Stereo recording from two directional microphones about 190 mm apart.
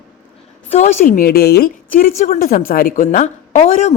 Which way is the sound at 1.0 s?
50° left (ahead or behind).